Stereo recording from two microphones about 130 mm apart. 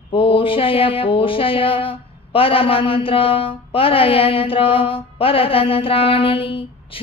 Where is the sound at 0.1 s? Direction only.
40° left (ahead or behind).